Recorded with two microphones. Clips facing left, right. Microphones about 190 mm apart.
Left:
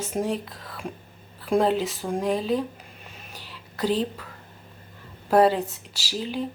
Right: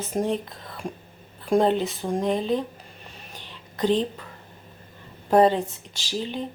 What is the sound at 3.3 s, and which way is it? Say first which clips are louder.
Whispering: right 1 dB; 5° left (ahead or behind).